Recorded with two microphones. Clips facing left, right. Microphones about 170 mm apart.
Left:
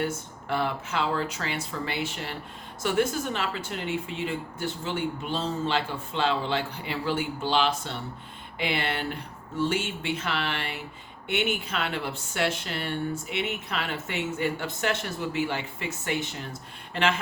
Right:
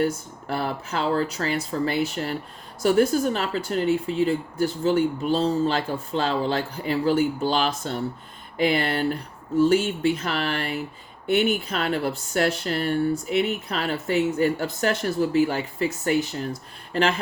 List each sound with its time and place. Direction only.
0.0 s speech: 40° right (ahead or behind)